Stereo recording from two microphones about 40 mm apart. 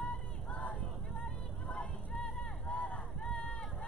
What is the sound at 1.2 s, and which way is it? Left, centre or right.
Music, left.